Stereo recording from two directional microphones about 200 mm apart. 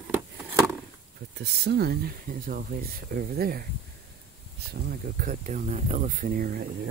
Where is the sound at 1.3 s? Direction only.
55° right (ahead or behind).